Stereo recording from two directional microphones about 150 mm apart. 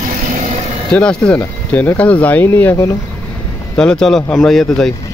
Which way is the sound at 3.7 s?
5° left (ahead or behind).